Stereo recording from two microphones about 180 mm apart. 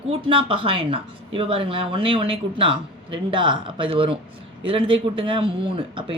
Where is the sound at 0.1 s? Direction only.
30° right (ahead or behind).